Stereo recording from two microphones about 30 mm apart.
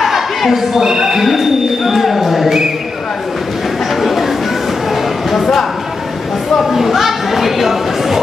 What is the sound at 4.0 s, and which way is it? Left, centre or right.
Chatter, centre.